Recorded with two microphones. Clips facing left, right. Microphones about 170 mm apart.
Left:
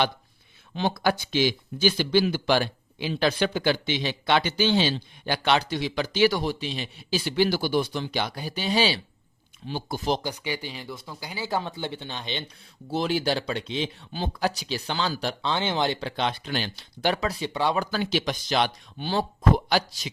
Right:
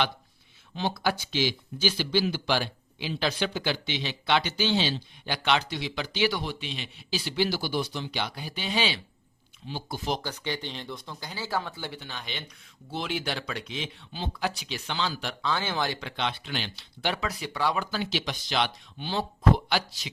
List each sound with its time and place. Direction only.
0.8 s speech: 55° left (ahead or behind)
10.2 s speech: 10° left (ahead or behind); by 12.5 s 25° left (ahead or behind)
12.9 s speech: 40° left (ahead or behind)
14.1 s speech: 40° left (ahead or behind)
17.4 s speech: 25° left (ahead or behind)
17.7 s speech: 50° left (ahead or behind)